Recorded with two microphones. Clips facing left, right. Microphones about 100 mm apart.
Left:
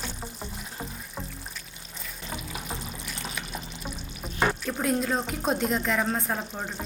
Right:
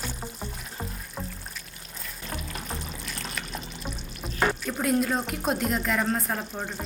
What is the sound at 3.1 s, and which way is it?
Pour, centre (ahead or behind).